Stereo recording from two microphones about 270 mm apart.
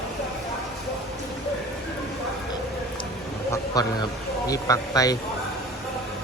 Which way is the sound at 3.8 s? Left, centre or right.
Centre.